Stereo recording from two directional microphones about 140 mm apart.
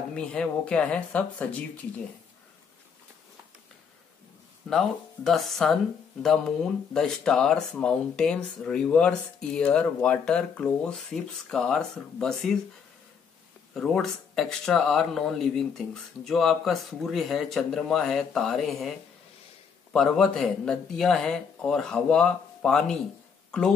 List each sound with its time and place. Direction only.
0.1 s speech: 5° left (ahead or behind)
4.6 s speech: centre (ahead or behind)
13.7 s speech: 5° left (ahead or behind)